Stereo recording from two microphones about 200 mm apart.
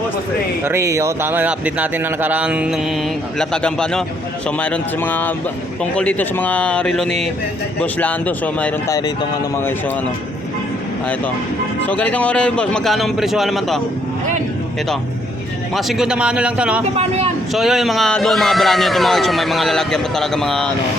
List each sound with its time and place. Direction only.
0.6 s a man's voice: 15° right (ahead or behind); by 9.0 s 5° left (ahead or behind)
11.9 s speech: 5° left (ahead or behind)
15.7 s speech: centre (ahead or behind)
16.9 s speech: 30° right (ahead or behind)
17.5 s speech: centre (ahead or behind)